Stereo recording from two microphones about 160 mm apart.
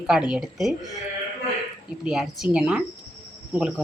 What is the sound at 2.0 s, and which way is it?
Speech, 5° right (ahead or behind).